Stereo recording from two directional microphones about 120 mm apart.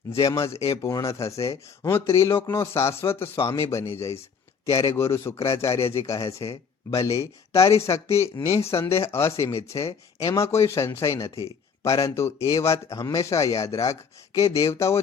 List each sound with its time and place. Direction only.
0.1 s speech: 30° left (ahead or behind)